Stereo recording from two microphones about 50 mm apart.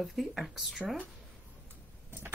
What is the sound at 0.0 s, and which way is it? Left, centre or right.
Speech, centre.